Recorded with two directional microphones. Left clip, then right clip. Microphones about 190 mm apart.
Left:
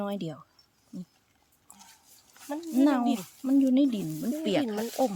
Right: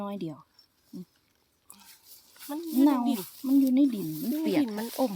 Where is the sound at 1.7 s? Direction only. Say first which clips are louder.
Left 1 dB; 40° right (ahead or behind).